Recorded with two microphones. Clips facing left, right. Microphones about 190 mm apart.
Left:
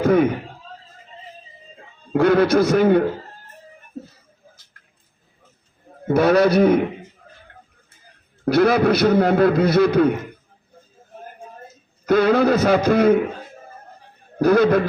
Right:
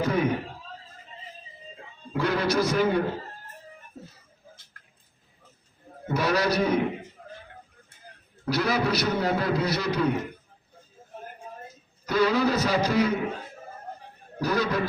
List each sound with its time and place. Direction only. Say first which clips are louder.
0.0 s speech: left 9 dB; 55° left (ahead or behind)
2.1 s a man's voice: left 10 dB; 55° left (ahead or behind)
6.1 s a man's voice: left 10 dB; 55° left (ahead or behind)
8.4 s a man's voice: left 10 dB; 55° left (ahead or behind)
12.0 s a man's voice: left 7 dB; 55° left (ahead or behind)
14.3 s a man's voice: left 11 dB; 55° left (ahead or behind)